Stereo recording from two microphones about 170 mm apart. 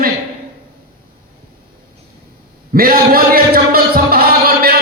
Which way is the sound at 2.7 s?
60° right (ahead or behind).